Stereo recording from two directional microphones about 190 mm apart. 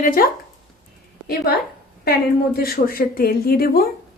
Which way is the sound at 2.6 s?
50° left (ahead or behind).